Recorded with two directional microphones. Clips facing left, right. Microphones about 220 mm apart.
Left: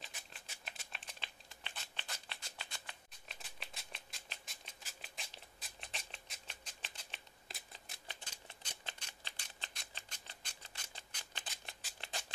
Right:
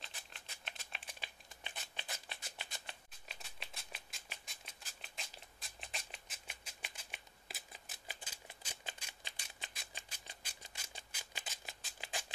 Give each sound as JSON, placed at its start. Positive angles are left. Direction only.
{"t": 0.0, "sound": "typing", "side_deg": 5}
{"t": 1.2, "sound": "a sound", "side_deg": -15}
{"t": 3.3, "sound": "scissors", "side_deg": 0}